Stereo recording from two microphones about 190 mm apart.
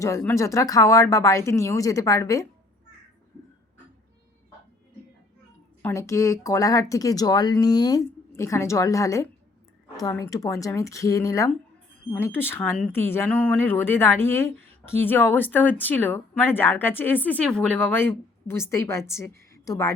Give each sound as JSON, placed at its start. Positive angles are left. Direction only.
{"t": 0.0, "sound": "speech", "side_deg": 15}
{"t": 5.8, "sound": "speech", "side_deg": 15}